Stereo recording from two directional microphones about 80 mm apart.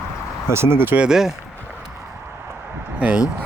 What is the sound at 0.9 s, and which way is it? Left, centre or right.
Speech, centre.